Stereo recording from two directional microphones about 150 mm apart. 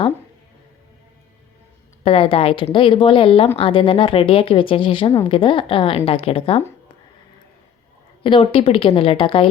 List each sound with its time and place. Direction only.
2.0 s speech: 40° left (ahead or behind)
8.2 s speech: 35° left (ahead or behind)